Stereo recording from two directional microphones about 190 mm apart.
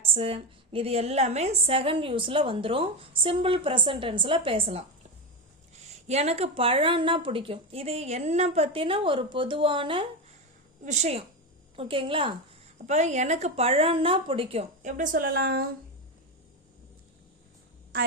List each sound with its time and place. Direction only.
0.0 s a woman's voice: 30° right (ahead or behind); by 15.6 s 55° right (ahead or behind)
17.9 s a woman's voice: 50° right (ahead or behind)